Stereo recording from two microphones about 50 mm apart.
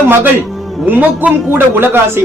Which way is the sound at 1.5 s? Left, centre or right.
Right.